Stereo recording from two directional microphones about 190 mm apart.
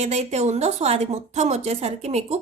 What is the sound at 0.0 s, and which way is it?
Speech, 35° right (ahead or behind).